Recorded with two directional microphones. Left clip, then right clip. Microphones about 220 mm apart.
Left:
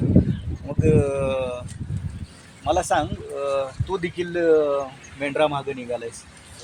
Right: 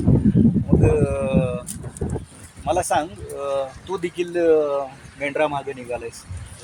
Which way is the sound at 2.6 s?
10° left (ahead or behind).